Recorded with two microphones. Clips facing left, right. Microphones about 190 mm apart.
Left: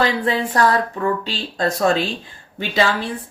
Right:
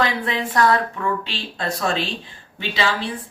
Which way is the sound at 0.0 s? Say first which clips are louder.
Left 3 dB; 35° left (ahead or behind).